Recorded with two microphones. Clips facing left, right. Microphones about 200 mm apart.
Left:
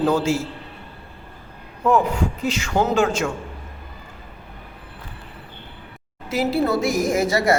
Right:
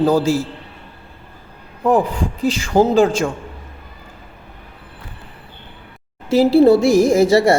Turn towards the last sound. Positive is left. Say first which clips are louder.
# right 6 dB
turn(degrees=-30)  # may be behind; listen again after turning